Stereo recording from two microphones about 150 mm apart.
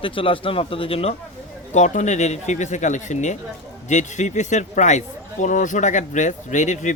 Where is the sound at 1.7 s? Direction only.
50° left (ahead or behind).